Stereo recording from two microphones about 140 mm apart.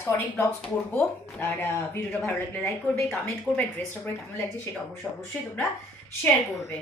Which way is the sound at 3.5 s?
5° right (ahead or behind).